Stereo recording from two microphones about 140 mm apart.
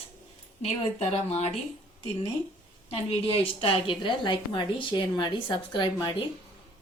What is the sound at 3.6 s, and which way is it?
A woman's voice, 40° left (ahead or behind).